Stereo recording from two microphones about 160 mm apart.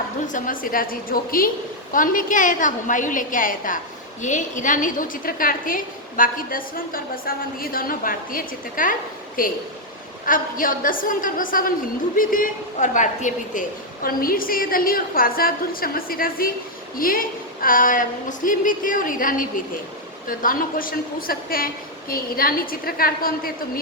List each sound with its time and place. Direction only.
0.3 s a woman's voice: 60° left (ahead or behind)